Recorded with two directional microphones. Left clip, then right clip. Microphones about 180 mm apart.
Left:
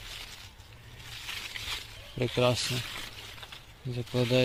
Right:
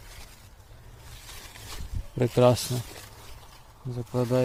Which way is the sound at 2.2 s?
40° right (ahead or behind).